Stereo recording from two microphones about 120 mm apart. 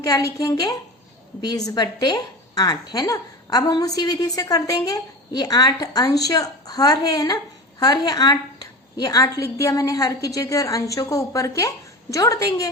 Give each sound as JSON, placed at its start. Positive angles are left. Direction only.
{"t": 0.0, "sound": "a woman's voice", "side_deg": 30}